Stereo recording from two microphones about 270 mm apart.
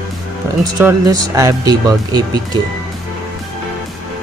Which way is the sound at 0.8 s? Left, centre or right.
Centre.